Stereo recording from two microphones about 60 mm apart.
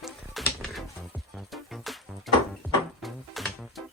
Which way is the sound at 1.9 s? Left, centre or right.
Centre.